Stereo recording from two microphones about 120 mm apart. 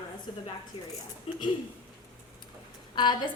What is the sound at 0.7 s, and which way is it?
Speech, 55° left (ahead or behind).